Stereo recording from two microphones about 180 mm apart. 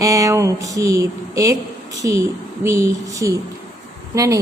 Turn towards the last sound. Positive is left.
turn(degrees=-15)  # may be behind; listen again after turning